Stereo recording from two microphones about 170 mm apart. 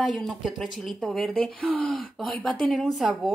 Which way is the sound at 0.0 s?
Centre (ahead or behind).